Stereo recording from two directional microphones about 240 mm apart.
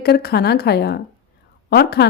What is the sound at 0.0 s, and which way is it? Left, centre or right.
A woman's voice, left.